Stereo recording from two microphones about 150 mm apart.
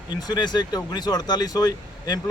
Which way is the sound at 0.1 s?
25° left (ahead or behind).